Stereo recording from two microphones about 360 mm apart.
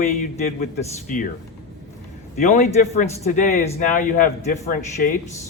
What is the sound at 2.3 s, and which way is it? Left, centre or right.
Speech, centre.